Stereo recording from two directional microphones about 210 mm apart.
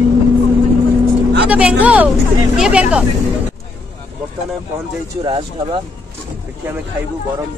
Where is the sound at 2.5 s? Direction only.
5° right (ahead or behind).